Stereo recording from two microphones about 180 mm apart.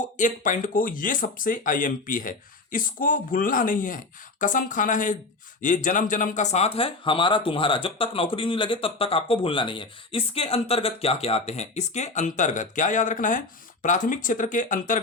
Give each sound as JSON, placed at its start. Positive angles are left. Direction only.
{"t": 0.2, "sound": "speech", "side_deg": 45}